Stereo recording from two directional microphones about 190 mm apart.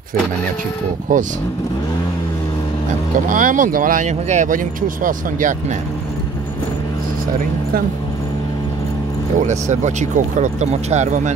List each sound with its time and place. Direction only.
1.1 s speech: 45° right (ahead or behind)
3.3 s speech: 45° right (ahead or behind)
9.4 s speech: 40° right (ahead or behind)